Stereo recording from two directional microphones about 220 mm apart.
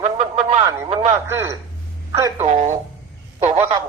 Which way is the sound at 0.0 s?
30° right (ahead or behind).